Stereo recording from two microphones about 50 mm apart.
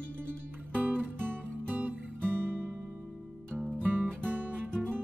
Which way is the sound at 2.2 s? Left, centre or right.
Right.